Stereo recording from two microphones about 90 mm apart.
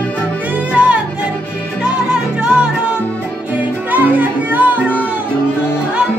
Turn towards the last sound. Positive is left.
turn(degrees=-20)  # may be behind; listen again after turning